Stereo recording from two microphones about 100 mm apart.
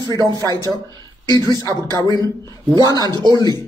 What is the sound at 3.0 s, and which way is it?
Speech, 45° right (ahead or behind).